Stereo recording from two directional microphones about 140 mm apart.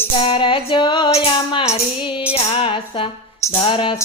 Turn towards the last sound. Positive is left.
turn(degrees=40)  # may be behind; listen again after turning